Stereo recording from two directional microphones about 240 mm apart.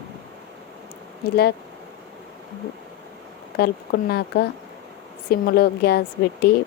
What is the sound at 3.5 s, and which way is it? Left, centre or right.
Speech, left.